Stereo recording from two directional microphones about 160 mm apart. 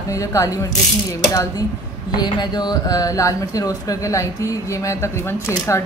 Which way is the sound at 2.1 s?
25° left (ahead or behind).